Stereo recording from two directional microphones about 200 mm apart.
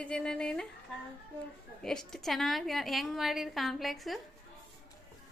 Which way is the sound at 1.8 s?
Centre (ahead or behind).